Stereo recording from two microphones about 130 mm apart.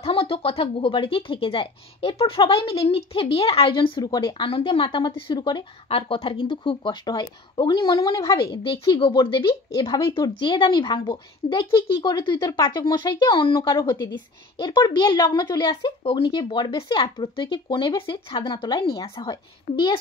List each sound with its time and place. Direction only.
0.0 s speech: 50° left (ahead or behind); by 8.4 s 30° left (ahead or behind)
8.4 s speech: 45° left (ahead or behind)
16.0 s speech: 45° left (ahead or behind)
16.3 s speech: 35° left (ahead or behind)
18.7 s speech: 30° left (ahead or behind)